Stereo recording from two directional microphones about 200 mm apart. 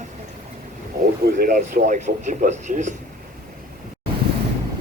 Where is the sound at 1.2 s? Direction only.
45° right (ahead or behind).